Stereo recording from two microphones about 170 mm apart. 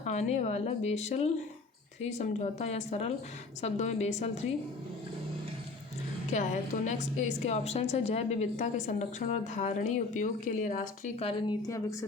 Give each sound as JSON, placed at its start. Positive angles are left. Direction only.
{"t": 0.0, "sound": "a woman's voice", "side_deg": 40}
{"t": 6.3, "sound": "a woman's voice", "side_deg": 45}